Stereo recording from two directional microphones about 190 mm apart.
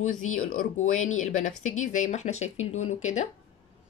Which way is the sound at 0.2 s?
40° left (ahead or behind).